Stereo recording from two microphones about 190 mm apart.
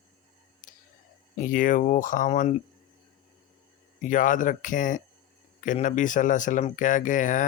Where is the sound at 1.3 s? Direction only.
45° left (ahead or behind).